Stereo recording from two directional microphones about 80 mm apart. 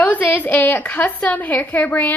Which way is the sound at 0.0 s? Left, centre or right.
Left.